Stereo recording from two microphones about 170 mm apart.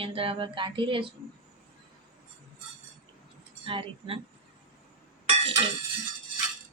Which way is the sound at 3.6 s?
30° right (ahead or behind).